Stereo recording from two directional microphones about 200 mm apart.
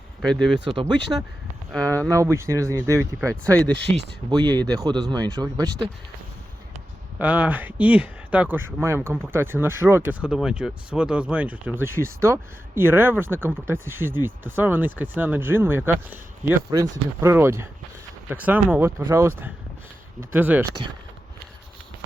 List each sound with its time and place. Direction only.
0.2 s speech: centre (ahead or behind)
0.8 s speech: 20° right (ahead or behind)
1.7 s speech: 5° left (ahead or behind)
2.0 s speech: 15° right (ahead or behind)
3.2 s speech: 5° left (ahead or behind)
3.8 s speech: 25° right (ahead or behind)
7.2 s speech: 5° right (ahead or behind)
20.3 s speech: 10° right (ahead or behind)